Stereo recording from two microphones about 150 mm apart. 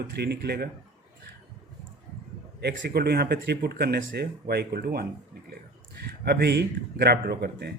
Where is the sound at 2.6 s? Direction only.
90° right.